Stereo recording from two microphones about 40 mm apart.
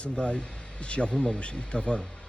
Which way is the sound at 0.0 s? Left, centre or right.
Left.